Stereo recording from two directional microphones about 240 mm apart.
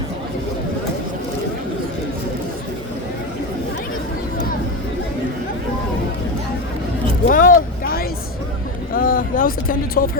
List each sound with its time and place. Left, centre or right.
7.3 s vehicle: left